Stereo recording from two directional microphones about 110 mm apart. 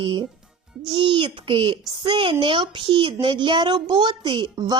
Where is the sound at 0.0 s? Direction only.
50° right (ahead or behind).